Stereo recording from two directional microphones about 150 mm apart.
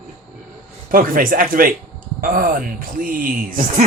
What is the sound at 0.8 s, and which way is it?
Speech, 65° right (ahead or behind).